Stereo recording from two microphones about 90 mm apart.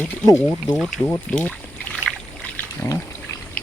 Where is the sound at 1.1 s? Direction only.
15° left (ahead or behind).